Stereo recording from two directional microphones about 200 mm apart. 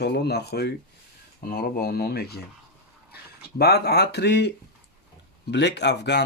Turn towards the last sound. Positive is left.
turn(degrees=60)  # may be behind; listen again after turning